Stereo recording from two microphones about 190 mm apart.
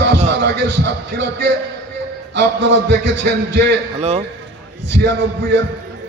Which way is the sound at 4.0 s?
35° right (ahead or behind).